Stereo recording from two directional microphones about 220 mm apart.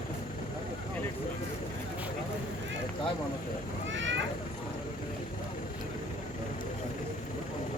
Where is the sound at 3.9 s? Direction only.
55° right (ahead or behind).